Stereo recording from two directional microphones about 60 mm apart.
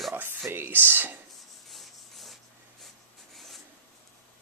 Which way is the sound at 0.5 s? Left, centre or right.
Right.